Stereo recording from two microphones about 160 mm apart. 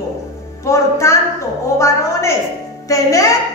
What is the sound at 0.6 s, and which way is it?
A woman's voice, 20° left (ahead or behind).